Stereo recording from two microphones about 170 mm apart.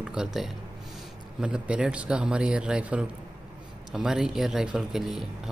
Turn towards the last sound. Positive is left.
turn(degrees=0)  # may be behind; listen again after turning